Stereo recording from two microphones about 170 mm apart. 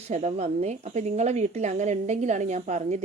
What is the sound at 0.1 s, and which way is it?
A woman's voice, 40° right (ahead or behind).